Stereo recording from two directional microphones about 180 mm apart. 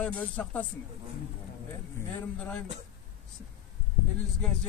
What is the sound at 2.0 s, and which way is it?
Speech, 10° left (ahead or behind).